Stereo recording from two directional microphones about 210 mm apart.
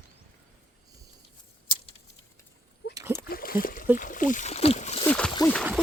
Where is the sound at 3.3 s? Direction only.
45° left (ahead or behind).